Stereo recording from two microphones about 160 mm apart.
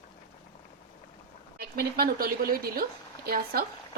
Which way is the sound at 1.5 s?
70° right (ahead or behind).